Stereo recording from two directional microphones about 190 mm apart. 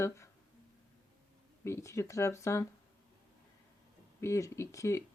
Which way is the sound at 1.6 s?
15° left (ahead or behind).